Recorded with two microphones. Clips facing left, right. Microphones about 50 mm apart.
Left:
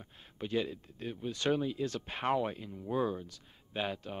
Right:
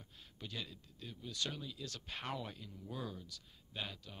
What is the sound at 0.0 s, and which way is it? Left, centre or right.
Speech, left.